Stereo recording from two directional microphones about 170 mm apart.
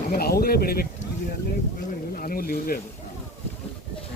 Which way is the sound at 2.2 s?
60° left (ahead or behind).